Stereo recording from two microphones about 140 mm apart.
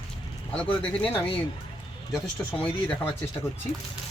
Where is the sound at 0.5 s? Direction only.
5° left (ahead or behind).